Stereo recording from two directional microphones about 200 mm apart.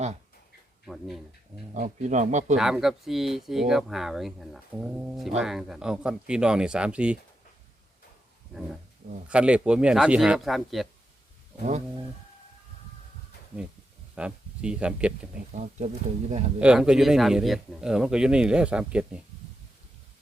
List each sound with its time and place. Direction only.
0.9 s speech: centre (ahead or behind)
1.7 s a man's voice: 40° right (ahead or behind)
2.6 s speech: centre (ahead or behind)
9.3 s speech: 5° right (ahead or behind)
14.2 s speech: 5° right (ahead or behind)
15.5 s a man's voice: 35° right (ahead or behind)
16.6 s speech: 5° right (ahead or behind)